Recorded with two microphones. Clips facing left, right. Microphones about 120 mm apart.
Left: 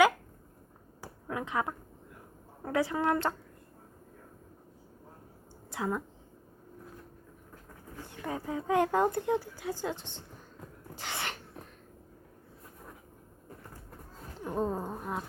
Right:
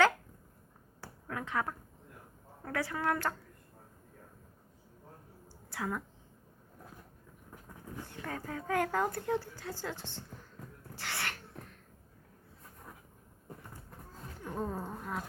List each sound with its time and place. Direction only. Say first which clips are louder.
1.0 s finger snapping: left 4 dB; 15° left (ahead or behind)
2.6 s a woman's voice: left 5 dB; 20° left (ahead or behind)
5.7 s a woman's voice: left 4 dB; 20° left (ahead or behind)
8.1 s a woman's voice: left 6 dB; 20° left (ahead or behind)
10.9 s a sound: left 2 dB; 20° left (ahead or behind)
14.3 s a sound: left 5 dB; 20° left (ahead or behind)